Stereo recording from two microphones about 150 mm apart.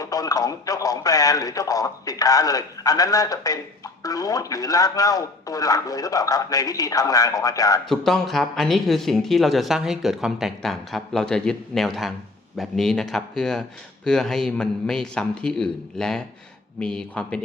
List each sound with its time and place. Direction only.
0.0 s speech: 25° left (ahead or behind)
7.9 s speech: centre (ahead or behind)